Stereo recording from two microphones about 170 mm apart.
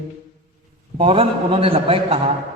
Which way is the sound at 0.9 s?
30° right (ahead or behind).